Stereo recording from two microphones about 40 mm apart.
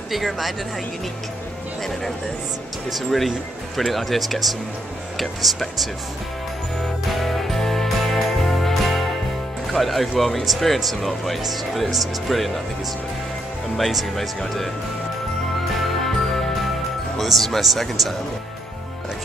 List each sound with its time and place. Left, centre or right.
0.1 s speech: centre
2.9 s speech: centre
7.1 s music: centre
9.7 s speech: centre
13.7 s speech: centre
15.8 s music: centre
17.2 s speech: centre